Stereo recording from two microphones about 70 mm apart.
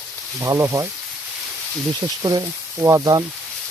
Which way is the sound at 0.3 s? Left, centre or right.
Right.